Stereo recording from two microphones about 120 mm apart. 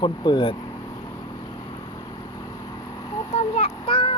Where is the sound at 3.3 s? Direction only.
60° left (ahead or behind).